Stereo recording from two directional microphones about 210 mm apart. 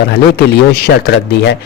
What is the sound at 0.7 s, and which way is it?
Speech, 50° left (ahead or behind).